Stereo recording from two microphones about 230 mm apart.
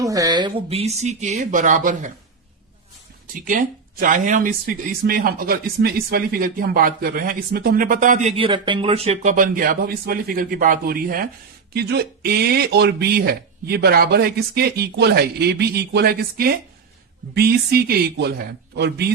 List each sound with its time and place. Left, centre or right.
0.0 s speech: centre; by 2.1 s right
3.3 s speech: right